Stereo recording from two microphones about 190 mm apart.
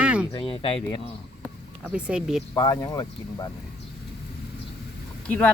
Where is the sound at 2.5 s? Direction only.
20° left (ahead or behind).